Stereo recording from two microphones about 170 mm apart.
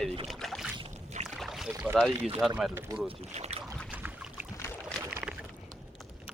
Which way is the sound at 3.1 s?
40° right (ahead or behind).